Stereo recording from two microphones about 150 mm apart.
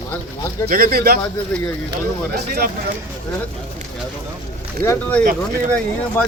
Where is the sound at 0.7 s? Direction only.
85° right.